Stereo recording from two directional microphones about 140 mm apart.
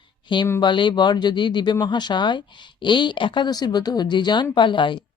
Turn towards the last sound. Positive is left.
turn(degrees=35)  # may be behind; listen again after turning